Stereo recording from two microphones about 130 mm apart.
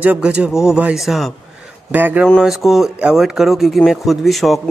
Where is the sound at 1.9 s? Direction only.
15° right (ahead or behind).